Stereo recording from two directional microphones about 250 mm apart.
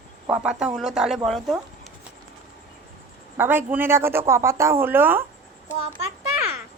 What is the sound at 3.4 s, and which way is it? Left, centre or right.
A woman's voice, centre.